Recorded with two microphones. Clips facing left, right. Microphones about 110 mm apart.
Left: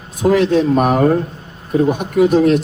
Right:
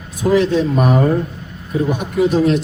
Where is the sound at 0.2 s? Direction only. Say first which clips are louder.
Left 2 dB; 50° left (ahead or behind).